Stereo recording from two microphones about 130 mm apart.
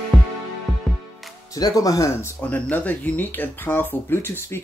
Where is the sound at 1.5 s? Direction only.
30° left (ahead or behind).